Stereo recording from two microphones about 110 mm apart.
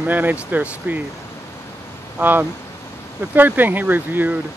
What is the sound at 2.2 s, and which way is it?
Speech, 15° right (ahead or behind).